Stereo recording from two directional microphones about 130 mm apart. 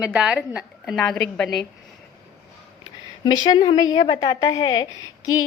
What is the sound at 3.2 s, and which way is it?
A woman's voice, 30° left (ahead or behind).